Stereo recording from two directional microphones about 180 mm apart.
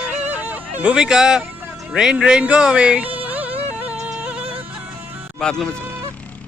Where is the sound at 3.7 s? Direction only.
10° right (ahead or behind).